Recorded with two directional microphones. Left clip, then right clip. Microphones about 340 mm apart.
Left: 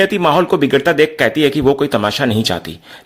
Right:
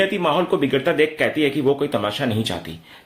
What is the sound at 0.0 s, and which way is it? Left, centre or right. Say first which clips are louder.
A man's voice: left 6 dB; left.